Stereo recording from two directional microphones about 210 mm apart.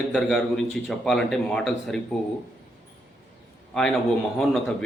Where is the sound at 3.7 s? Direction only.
Centre (ahead or behind).